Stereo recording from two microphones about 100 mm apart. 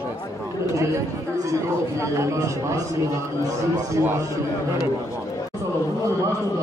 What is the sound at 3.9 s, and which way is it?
Speech, 25° right (ahead or behind).